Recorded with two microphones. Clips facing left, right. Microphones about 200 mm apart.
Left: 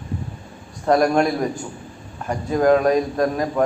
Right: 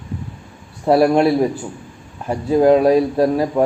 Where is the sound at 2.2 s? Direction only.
10° right (ahead or behind).